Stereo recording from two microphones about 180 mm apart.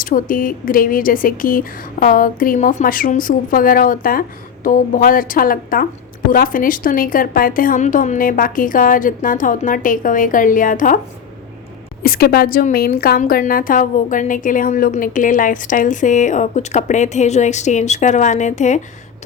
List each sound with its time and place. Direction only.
0.0 s a woman's voice: 50° left (ahead or behind)
12.0 s a woman's voice: 55° left (ahead or behind)